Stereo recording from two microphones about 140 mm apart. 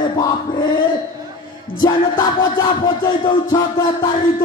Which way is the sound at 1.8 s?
30° left (ahead or behind).